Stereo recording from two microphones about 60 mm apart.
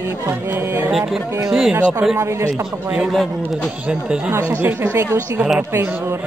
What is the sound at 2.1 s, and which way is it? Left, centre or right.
Music, right.